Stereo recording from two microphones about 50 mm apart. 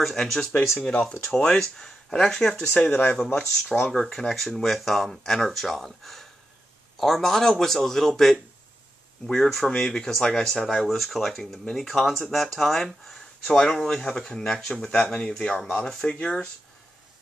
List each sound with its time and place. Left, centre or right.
0.0 s speech: centre
0.8 s speech: left
3.3 s speech: centre